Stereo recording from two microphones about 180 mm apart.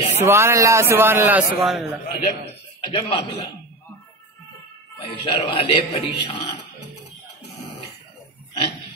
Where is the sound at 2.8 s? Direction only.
30° left (ahead or behind).